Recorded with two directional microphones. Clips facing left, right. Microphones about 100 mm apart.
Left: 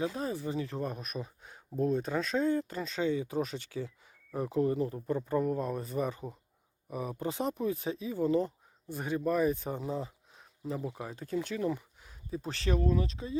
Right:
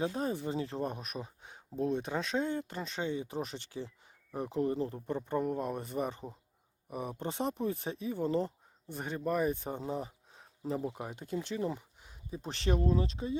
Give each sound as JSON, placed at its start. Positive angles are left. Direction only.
{"t": 0.0, "sound": "speech", "side_deg": -30}
{"t": 9.0, "sound": "speech", "side_deg": -40}
{"t": 9.3, "sound": "speech", "side_deg": -25}